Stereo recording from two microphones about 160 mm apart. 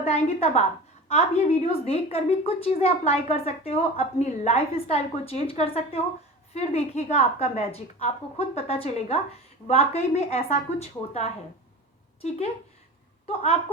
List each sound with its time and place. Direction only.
0.0 s a woman's voice: 40° left (ahead or behind)
13.2 s a woman's voice: 40° left (ahead or behind)